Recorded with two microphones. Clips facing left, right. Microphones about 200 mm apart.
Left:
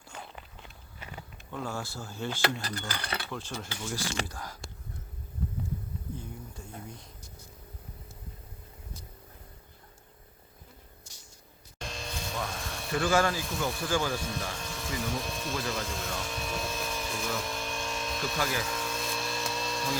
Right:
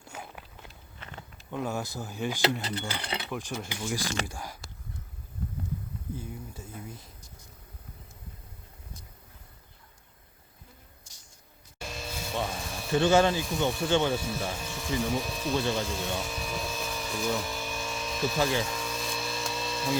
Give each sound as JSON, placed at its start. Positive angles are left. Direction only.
{"t": 0.1, "sound": "walk", "side_deg": -5}
{"t": 0.9, "sound": "a sound", "side_deg": 10}
{"t": 1.5, "sound": "speech", "side_deg": -20}
{"t": 6.1, "sound": "speech", "side_deg": -5}
{"t": 11.8, "sound": "vehicle", "side_deg": -5}
{"t": 12.5, "sound": "a sound", "side_deg": 0}
{"t": 12.9, "sound": "speech", "side_deg": -25}
{"t": 14.2, "sound": "speech", "side_deg": -5}
{"t": 15.7, "sound": "a sound", "side_deg": 0}
{"t": 18.3, "sound": "speech", "side_deg": -25}
{"t": 18.6, "sound": "electric toothbrush", "side_deg": 0}